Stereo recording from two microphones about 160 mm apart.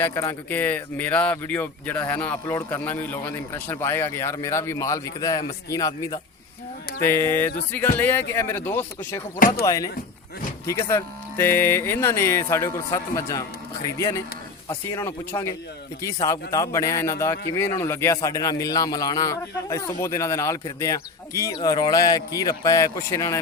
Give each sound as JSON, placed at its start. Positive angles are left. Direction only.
{"t": 0.0, "sound": "a man's voice", "side_deg": 15}
{"t": 14.8, "sound": "a man's voice", "side_deg": 15}